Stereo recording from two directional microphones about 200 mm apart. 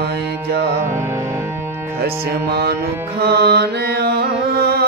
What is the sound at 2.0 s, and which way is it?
Music, 55° right (ahead or behind).